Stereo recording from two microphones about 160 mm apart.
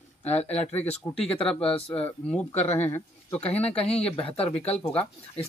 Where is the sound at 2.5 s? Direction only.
40° left (ahead or behind).